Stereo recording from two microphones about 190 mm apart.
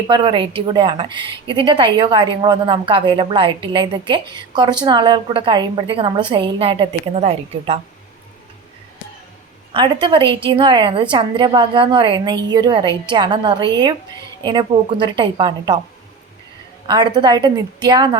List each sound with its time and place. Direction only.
0.1 s a woman's voice: 25° right (ahead or behind)
9.7 s a woman's voice: 25° right (ahead or behind)
16.8 s a woman's voice: 25° right (ahead or behind)